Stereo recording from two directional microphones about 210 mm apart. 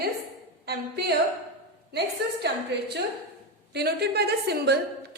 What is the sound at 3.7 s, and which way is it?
A woman's voice, 50° right (ahead or behind).